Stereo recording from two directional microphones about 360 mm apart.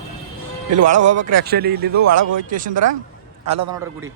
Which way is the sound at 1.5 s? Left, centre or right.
Right.